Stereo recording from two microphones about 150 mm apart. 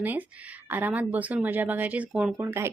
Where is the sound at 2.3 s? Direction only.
15° right (ahead or behind).